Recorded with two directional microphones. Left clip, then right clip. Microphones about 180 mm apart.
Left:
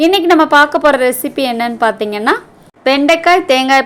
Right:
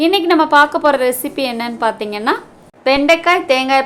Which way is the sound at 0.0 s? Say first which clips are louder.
Left 3 dB; 20° left (ahead or behind).